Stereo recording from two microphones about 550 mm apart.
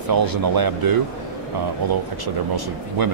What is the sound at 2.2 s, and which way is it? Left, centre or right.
Speech, right.